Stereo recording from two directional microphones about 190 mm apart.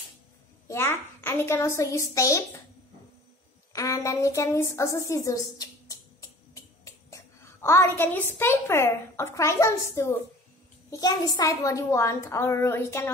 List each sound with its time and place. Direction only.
0.7 s a woman's voice: 10° left (ahead or behind)
3.7 s a woman's voice: 15° left (ahead or behind)